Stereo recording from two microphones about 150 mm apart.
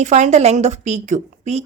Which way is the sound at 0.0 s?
50° right (ahead or behind).